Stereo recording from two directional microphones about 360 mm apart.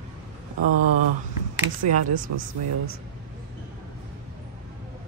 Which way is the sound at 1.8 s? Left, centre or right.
Right.